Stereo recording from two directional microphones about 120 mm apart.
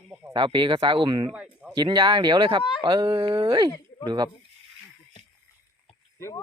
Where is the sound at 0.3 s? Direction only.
40° right (ahead or behind).